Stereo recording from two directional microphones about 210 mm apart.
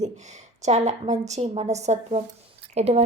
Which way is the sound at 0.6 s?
35° right (ahead or behind).